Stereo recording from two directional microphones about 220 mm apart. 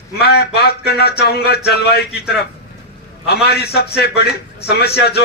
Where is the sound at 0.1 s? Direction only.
45° left (ahead or behind).